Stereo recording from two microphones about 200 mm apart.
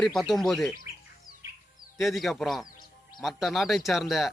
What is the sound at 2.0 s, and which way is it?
Speech, centre (ahead or behind).